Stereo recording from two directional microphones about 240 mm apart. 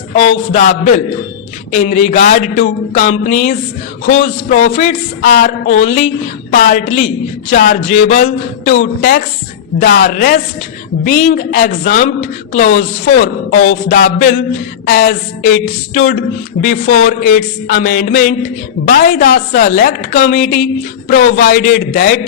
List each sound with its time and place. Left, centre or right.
0.3 s a woman's voice: left